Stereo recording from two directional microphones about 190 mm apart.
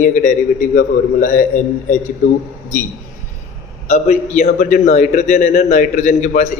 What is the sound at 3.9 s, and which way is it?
A man's voice, 40° left (ahead or behind).